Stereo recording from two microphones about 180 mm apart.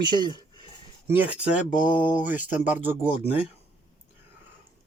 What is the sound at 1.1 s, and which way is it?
Speech, 10° right (ahead or behind).